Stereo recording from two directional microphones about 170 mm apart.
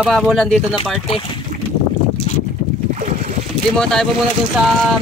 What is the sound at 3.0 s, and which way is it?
Boat, 45° right (ahead or behind).